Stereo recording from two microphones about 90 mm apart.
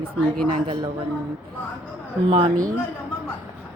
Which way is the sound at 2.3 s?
90° right.